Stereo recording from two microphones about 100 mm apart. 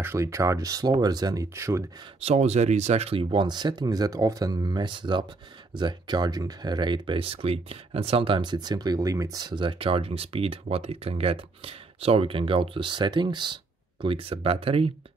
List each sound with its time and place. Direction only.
0.0 s speech: 25° right (ahead or behind)
2.1 s speech: 90° right; by 3.4 s 65° right (ahead or behind)
3.4 s speech: 45° right (ahead or behind)
9.5 s speech: 55° right (ahead or behind)
14.0 s speech: 65° right (ahead or behind)